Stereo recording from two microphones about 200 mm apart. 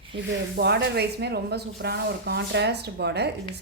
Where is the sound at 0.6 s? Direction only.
55° right (ahead or behind).